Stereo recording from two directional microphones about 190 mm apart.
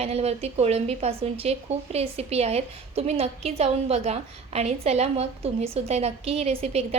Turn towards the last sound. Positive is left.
turn(degrees=-30)  # may be behind; listen again after turning